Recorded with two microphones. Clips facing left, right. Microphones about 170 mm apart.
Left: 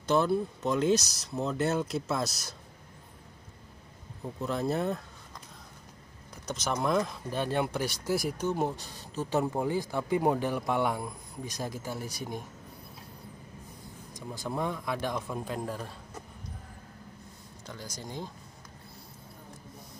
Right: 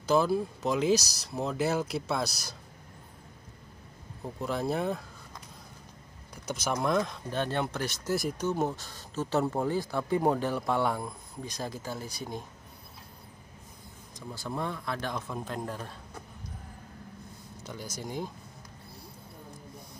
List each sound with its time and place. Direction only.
0.0 s speech: 5° right (ahead or behind)
4.4 s speech: centre (ahead or behind)
6.4 s speech: centre (ahead or behind); by 8.7 s 15° left (ahead or behind)
8.7 s speech: 40° left (ahead or behind)
9.2 s speech: 15° left (ahead or behind)
14.1 s speech: 15° left (ahead or behind)
17.6 s speech: 10° right (ahead or behind)